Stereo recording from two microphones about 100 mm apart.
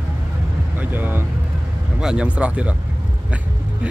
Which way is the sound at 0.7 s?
20° right (ahead or behind).